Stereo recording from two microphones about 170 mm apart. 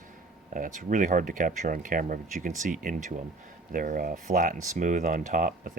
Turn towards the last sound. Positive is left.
turn(degrees=-50)  # may be behind; listen again after turning